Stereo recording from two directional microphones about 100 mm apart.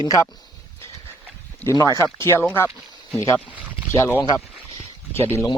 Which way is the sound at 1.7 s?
35° left (ahead or behind).